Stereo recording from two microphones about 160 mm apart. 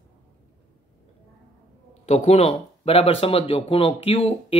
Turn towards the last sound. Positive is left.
turn(degrees=40)  # may be behind; listen again after turning